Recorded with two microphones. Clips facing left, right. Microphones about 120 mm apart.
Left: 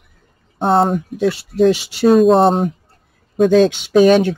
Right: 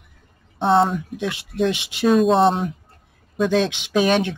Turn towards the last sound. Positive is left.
turn(degrees=40)  # may be behind; listen again after turning